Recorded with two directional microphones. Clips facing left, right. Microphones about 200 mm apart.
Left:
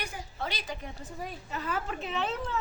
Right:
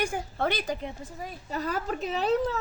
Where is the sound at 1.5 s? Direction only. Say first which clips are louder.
Right 5 dB; 40° right (ahead or behind).